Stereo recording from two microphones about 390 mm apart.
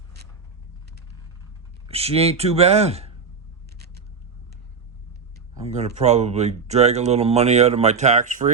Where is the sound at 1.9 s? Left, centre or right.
Centre.